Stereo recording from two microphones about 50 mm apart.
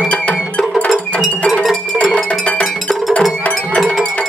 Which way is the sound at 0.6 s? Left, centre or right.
Left.